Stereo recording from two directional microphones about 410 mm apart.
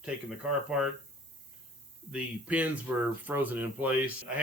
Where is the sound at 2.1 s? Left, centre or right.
Centre.